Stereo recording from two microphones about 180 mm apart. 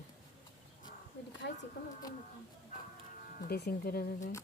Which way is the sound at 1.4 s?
80° left.